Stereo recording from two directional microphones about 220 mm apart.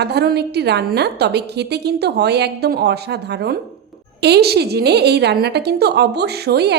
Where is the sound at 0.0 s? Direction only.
50° right (ahead or behind).